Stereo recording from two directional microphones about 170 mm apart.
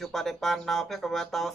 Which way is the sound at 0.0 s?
Centre (ahead or behind).